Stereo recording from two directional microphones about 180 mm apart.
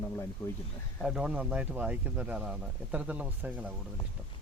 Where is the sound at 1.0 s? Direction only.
Centre (ahead or behind).